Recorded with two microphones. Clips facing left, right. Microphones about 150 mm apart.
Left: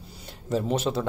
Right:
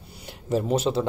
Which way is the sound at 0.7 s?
30° right (ahead or behind).